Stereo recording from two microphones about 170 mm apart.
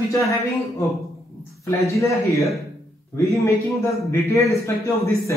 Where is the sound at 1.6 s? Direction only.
20° left (ahead or behind).